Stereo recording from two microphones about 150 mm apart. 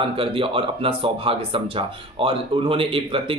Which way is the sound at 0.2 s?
35° right (ahead or behind).